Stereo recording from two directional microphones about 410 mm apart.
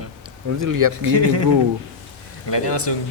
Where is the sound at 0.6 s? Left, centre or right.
Right.